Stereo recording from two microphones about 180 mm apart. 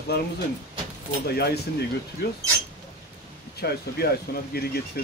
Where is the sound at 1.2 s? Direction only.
65° left (ahead or behind).